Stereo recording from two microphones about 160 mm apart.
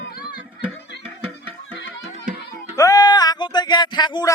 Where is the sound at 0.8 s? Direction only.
90° left.